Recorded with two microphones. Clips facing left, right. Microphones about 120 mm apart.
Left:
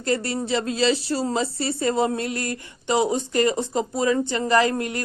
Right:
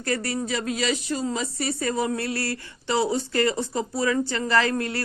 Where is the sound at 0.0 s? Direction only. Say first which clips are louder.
Left 3 dB; 25° left (ahead or behind).